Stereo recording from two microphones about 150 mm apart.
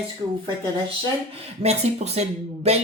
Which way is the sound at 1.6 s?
45° right (ahead or behind).